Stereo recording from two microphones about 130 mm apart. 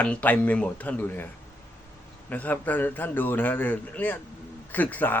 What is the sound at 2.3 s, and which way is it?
Speech, 15° left (ahead or behind).